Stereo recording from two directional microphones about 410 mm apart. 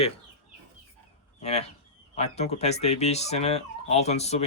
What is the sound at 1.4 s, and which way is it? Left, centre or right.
Speech, centre.